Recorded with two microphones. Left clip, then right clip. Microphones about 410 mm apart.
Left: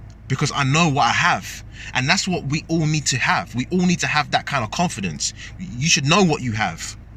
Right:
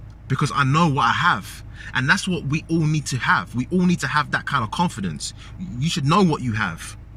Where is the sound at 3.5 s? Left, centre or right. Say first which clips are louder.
Left 1 dB; left.